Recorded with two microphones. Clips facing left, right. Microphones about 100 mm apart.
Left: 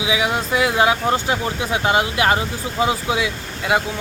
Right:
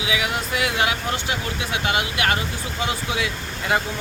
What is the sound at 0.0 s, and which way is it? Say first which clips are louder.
Speech: left 4 dB; 25° left (ahead or behind).